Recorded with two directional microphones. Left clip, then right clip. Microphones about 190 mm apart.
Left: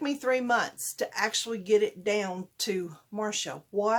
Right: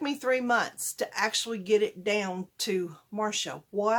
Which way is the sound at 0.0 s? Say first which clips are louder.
Even; centre (ahead or behind).